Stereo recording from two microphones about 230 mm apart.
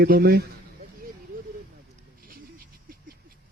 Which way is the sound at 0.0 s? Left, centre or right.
Right.